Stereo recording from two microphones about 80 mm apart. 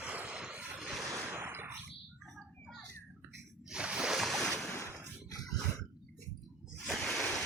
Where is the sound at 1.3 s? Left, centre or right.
Right.